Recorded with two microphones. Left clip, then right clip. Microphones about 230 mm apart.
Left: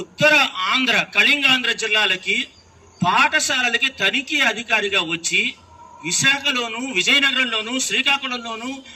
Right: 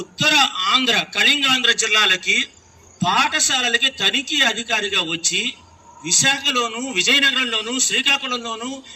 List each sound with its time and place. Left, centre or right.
0.2 s a man's voice: centre
1.8 s a man's voice: centre
2.2 s a man's voice: left
3.0 s a man's voice: centre